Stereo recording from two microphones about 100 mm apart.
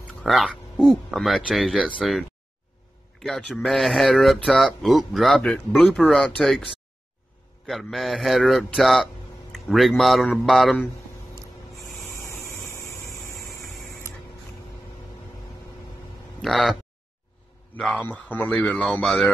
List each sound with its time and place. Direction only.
0.2 s speech: centre (ahead or behind)
3.2 s speech: 5° left (ahead or behind)
12.6 s a sound: 30° left (ahead or behind)
13.5 s a sound: centre (ahead or behind)
16.3 s speech: centre (ahead or behind)
17.7 s a man's voice: 10° left (ahead or behind)
18.5 s speech: 5° left (ahead or behind)